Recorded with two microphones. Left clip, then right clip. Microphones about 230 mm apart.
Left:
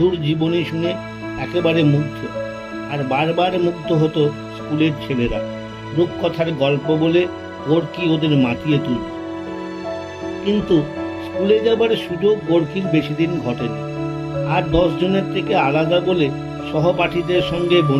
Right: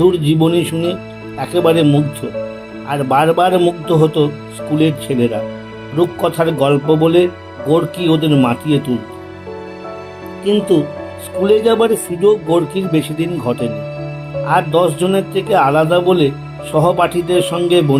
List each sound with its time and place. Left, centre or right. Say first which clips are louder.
0.0 s speech: right 6 dB; right
2.9 s speech: right 7 dB; right
11.4 s speech: right 4 dB; right